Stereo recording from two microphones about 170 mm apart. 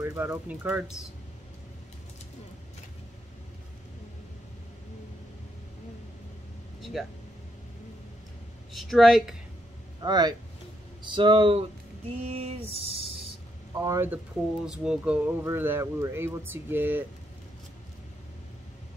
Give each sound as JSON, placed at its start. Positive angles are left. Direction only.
{"t": 0.0, "sound": "speech", "side_deg": -15}
{"t": 6.8, "sound": "speech", "side_deg": 0}
{"t": 8.7, "sound": "speech", "side_deg": 0}
{"t": 10.0, "sound": "speech", "side_deg": -25}
{"t": 12.2, "sound": "a sound", "side_deg": -40}
{"t": 13.7, "sound": "speech", "side_deg": -20}